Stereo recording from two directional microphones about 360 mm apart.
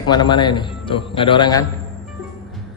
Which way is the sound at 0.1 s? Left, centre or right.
Centre.